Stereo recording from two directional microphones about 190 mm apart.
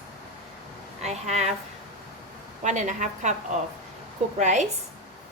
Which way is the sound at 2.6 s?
40° right (ahead or behind).